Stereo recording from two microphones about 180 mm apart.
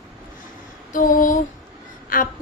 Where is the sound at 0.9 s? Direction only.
45° left (ahead or behind).